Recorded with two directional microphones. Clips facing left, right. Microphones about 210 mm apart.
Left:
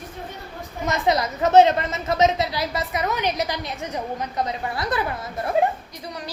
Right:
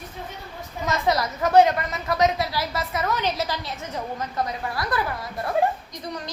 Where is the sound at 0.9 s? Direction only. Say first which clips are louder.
Left 2 dB; 20° left (ahead or behind).